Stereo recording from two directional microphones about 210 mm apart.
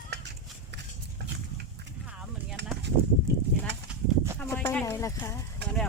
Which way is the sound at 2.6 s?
55° right (ahead or behind).